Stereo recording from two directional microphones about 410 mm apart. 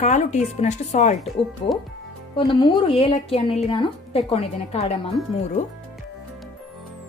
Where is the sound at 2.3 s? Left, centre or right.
Centre.